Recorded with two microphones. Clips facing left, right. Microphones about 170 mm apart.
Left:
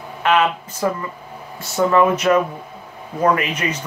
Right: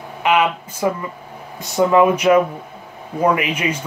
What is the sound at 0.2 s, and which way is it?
Speech, 10° right (ahead or behind).